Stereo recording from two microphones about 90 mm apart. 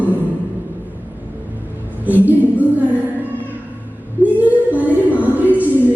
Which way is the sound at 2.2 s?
20° right (ahead or behind).